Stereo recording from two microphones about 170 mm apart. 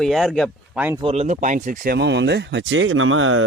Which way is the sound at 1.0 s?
35° right (ahead or behind).